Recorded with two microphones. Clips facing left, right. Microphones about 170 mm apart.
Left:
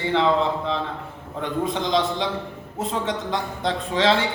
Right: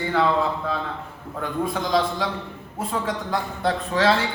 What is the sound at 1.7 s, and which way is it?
Speech, 20° left (ahead or behind).